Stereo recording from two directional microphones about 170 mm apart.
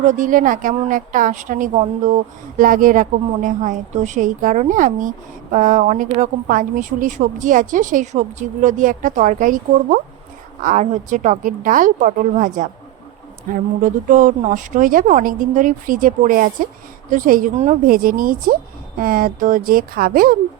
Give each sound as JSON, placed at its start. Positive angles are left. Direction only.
{"t": 0.0, "sound": "a woman's voice", "side_deg": -45}